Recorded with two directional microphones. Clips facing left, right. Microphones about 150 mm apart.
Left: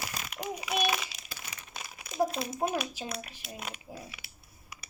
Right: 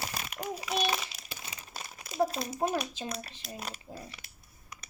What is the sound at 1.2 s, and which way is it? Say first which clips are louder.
Crumpling: right 1 dB; 25° right (ahead or behind).